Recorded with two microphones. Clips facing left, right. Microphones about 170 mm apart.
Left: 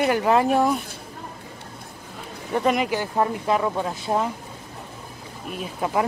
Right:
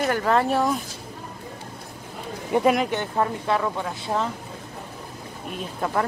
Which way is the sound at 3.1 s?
15° left (ahead or behind).